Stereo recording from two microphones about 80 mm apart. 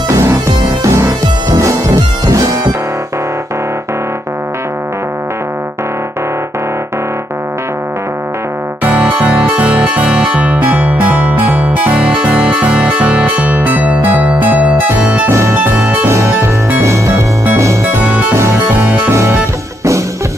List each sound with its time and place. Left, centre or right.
0.1 s music: right
8.8 s music: centre
15.2 s music: right